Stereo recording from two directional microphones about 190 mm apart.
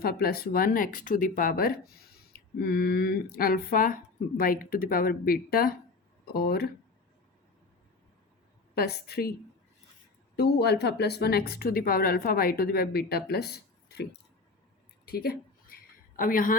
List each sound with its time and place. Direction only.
0.0 s speech: 50° left (ahead or behind)
8.7 s speech: 55° left (ahead or behind)
10.3 s speech: 60° left (ahead or behind)
15.0 s a sound: 55° left (ahead or behind)